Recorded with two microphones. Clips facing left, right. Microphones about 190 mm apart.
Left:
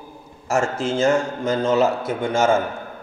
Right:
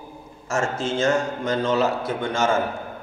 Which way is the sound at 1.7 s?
25° left (ahead or behind).